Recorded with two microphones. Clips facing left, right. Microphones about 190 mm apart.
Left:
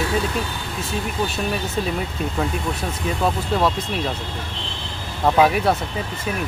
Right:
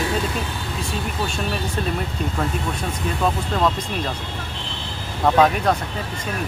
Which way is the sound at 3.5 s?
10° left (ahead or behind).